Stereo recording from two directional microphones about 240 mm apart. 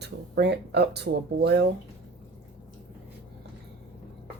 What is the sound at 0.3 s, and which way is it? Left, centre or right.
Speech, right.